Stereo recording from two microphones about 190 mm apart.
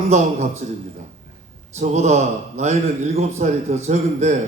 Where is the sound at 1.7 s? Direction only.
35° right (ahead or behind).